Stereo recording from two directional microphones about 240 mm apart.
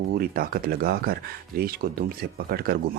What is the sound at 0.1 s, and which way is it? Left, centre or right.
Speech, right.